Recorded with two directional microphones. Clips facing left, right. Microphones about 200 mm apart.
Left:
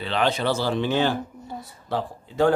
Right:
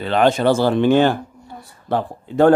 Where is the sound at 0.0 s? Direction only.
50° right (ahead or behind).